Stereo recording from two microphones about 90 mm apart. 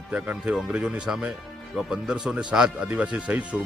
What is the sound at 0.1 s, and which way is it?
Speech, 15° right (ahead or behind).